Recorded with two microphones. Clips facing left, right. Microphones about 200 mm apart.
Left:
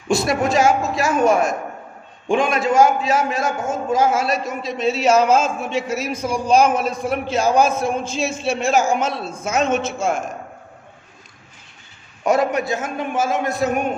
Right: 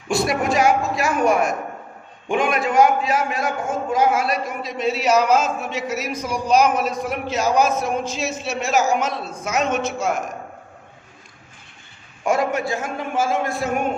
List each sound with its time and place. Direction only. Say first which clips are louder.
0.1 s a man's voice: left 2 dB; 25° left (ahead or behind)
12.2 s a man's voice: left 2 dB; 20° left (ahead or behind)